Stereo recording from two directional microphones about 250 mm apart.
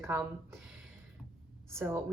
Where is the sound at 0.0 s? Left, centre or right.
Centre.